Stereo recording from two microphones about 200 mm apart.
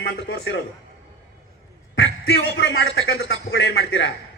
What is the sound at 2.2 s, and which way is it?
A man's voice, 60° left (ahead or behind).